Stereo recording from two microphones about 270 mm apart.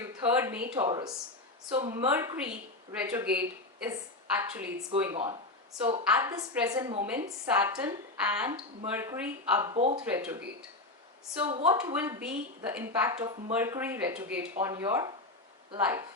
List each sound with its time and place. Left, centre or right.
0.0 s a woman's voice: centre
4.9 s a woman's voice: centre
9.7 s speech: right
10.0 s a woman's voice: centre
11.4 s a woman's voice: centre